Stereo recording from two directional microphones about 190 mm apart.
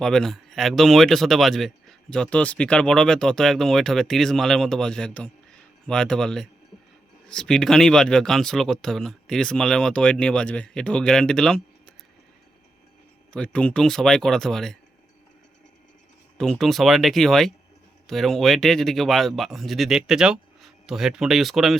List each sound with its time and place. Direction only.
0.0 s speech: 5° left (ahead or behind)
13.3 s speech: 5° left (ahead or behind)
16.4 s speech: centre (ahead or behind)